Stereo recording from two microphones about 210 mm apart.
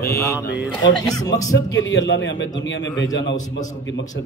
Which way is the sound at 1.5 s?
55° left (ahead or behind).